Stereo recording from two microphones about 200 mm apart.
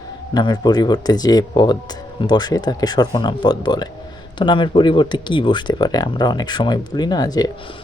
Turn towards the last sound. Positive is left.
turn(degrees=20)  # may be behind; listen again after turning